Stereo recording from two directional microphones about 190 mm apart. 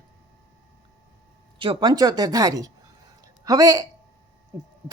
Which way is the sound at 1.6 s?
25° right (ahead or behind).